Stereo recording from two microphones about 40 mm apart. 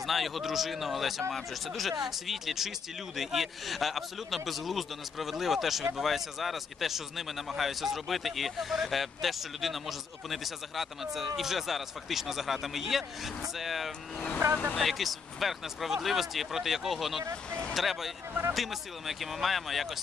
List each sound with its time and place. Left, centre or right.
0.0 s a man's voice: centre
17.5 s speech: left
17.7 s a man's voice: centre